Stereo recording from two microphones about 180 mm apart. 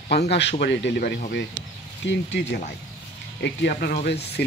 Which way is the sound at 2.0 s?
75° left (ahead or behind).